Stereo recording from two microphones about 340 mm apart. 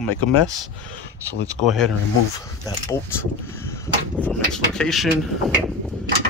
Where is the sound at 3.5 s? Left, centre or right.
Centre.